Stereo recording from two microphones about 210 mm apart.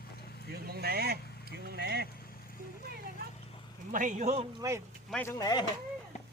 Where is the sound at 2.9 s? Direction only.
45° right (ahead or behind).